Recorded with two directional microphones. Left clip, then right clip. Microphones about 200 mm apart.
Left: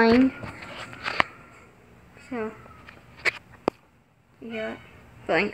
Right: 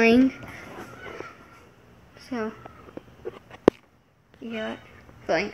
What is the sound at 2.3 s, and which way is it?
Speech, 5° right (ahead or behind).